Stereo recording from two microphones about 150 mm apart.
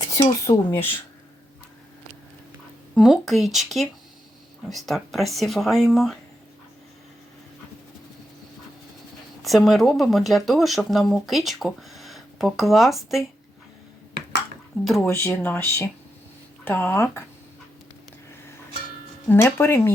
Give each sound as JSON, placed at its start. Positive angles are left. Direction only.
{"t": 0.4, "sound": "speech", "side_deg": 15}
{"t": 2.9, "sound": "speech", "side_deg": 0}
{"t": 9.4, "sound": "speech", "side_deg": 0}
{"t": 15.0, "sound": "speech", "side_deg": 15}
{"t": 19.3, "sound": "speech", "side_deg": 15}